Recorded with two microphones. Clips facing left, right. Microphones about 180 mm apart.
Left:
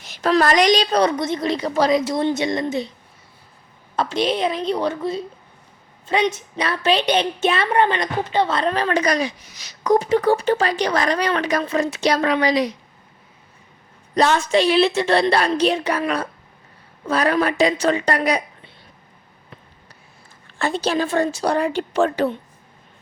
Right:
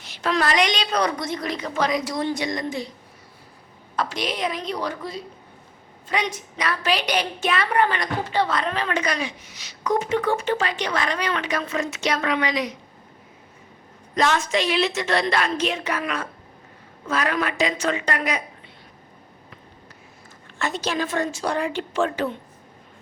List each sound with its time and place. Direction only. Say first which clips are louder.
0.1 s a woman's voice: left 6 dB; 40° left (ahead or behind); by 2.9 s 25° left (ahead or behind)
3.9 s a woman's voice: left 6 dB; 25° left (ahead or behind)
14.2 s a woman's voice: left 5 dB; 35° left (ahead or behind)
20.6 s a woman's voice: left 5 dB; 30° left (ahead or behind)